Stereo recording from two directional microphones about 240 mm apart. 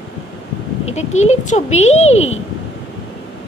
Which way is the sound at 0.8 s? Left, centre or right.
Left.